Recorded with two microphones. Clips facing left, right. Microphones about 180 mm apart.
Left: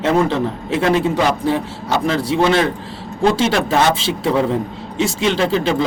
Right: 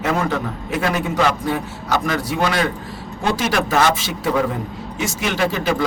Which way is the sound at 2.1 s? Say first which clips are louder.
Left 8 dB; 30° left (ahead or behind).